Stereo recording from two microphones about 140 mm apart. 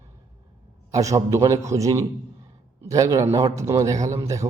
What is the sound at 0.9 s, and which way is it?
A man's voice, 25° right (ahead or behind).